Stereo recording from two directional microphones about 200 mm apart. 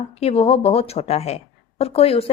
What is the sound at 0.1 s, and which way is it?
A woman's voice, 30° left (ahead or behind).